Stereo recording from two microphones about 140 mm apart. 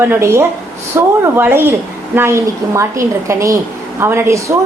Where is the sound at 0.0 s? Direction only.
15° right (ahead or behind).